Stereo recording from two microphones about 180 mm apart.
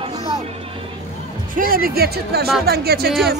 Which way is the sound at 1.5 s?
50° right (ahead or behind).